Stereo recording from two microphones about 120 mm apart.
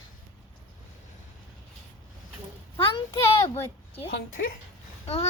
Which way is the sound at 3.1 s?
25° left (ahead or behind).